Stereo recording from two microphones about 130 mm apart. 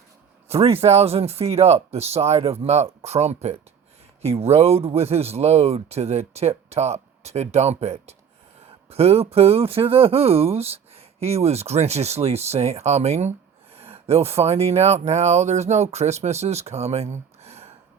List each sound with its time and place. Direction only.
0.4 s speech: 50° right (ahead or behind)